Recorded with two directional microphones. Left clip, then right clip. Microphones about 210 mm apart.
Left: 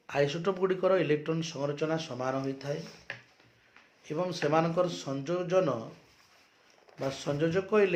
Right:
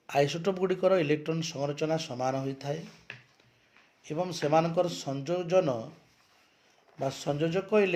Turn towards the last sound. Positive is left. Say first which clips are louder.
# even
turn(degrees=-30)  # may be behind; listen again after turning